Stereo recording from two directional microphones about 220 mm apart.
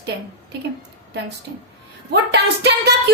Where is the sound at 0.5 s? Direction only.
50° right (ahead or behind).